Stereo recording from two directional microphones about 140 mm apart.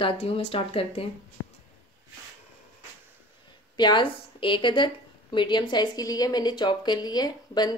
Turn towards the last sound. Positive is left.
turn(degrees=30)  # may be behind; listen again after turning